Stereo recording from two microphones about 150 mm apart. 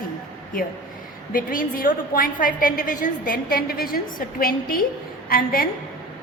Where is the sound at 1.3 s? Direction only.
65° left (ahead or behind).